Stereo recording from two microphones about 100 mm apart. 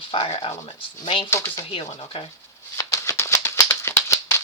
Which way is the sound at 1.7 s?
65° left (ahead or behind).